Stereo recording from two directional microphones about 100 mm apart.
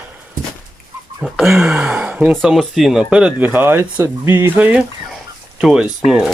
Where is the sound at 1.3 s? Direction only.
Centre (ahead or behind).